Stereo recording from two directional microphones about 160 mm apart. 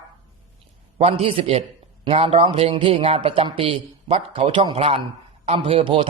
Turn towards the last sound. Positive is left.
turn(degrees=-30)  # may be behind; listen again after turning